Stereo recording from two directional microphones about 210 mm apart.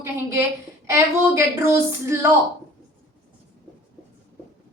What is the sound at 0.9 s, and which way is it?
Speech, 10° right (ahead or behind).